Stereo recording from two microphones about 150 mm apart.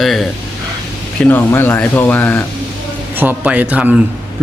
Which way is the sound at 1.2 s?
15° left (ahead or behind).